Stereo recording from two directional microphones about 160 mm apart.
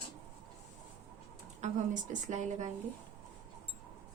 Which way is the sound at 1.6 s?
45° right (ahead or behind).